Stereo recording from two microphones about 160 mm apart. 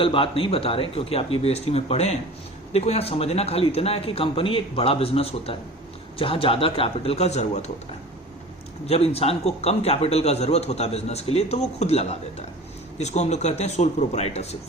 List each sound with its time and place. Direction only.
0.0 s a man's voice: 35° left (ahead or behind)
8.9 s a man's voice: 40° left (ahead or behind)